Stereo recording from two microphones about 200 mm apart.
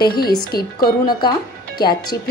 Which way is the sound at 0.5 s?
50° left (ahead or behind).